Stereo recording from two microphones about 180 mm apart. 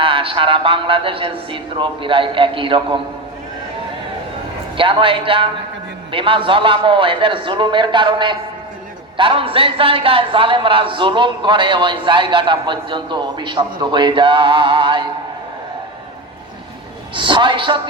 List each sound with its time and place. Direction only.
0.0 s a man's voice: 30° right (ahead or behind)
4.8 s a man's voice: 30° right (ahead or behind)
17.2 s a man's voice: 25° right (ahead or behind)